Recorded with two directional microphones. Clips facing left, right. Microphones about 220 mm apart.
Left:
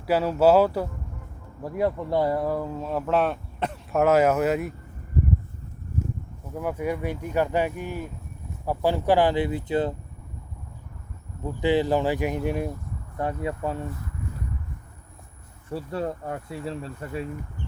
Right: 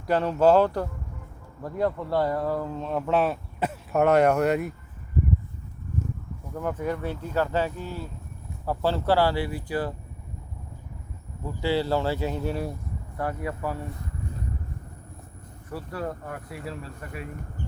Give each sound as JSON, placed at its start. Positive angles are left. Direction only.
{"t": 0.1, "sound": "speech", "side_deg": 5}
{"t": 6.5, "sound": "speech", "side_deg": 10}
{"t": 11.6, "sound": "speech", "side_deg": 15}
{"t": 15.7, "sound": "speech", "side_deg": 25}